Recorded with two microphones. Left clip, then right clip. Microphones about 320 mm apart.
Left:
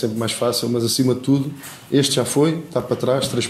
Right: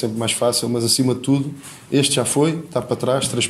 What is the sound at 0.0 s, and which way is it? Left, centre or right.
Speech, centre.